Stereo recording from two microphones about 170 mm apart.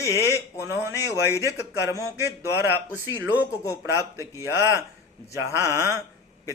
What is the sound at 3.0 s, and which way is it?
Speech, 20° left (ahead or behind).